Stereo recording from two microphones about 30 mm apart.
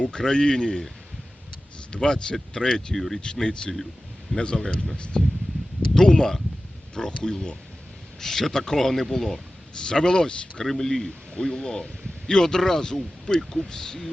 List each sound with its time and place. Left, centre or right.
0.2 s a man's voice: left
1.9 s a man's voice: left
2.9 s a man's voice: centre
3.2 s a man's voice: left
5.9 s a man's voice: left
8.2 s a man's voice: centre
9.7 s a man's voice: left
10.7 s a man's voice: centre